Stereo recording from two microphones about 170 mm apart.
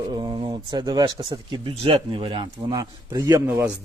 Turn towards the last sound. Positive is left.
turn(degrees=-15)  # may be behind; listen again after turning